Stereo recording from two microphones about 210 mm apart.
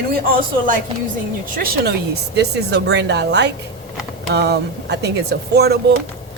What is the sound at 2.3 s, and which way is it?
Speech, 50° right (ahead or behind).